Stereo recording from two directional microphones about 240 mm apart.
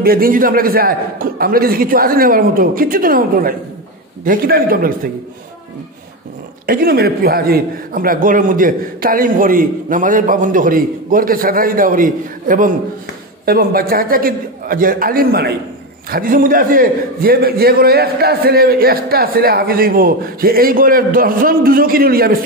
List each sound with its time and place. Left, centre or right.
0.0 s a man's voice: right
6.6 s a man's voice: right